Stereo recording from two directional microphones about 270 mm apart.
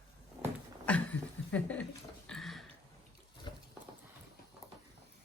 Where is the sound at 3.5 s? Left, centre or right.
Centre.